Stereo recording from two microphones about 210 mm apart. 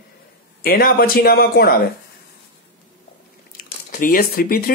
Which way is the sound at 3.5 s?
40° left (ahead or behind).